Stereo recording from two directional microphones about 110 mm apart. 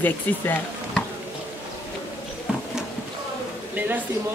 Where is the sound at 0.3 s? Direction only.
15° left (ahead or behind).